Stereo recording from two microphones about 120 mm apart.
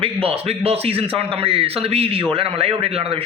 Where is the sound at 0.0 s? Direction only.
50° right (ahead or behind).